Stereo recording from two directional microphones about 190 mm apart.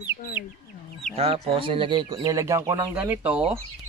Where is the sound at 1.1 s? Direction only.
30° right (ahead or behind); by 3.4 s 10° right (ahead or behind).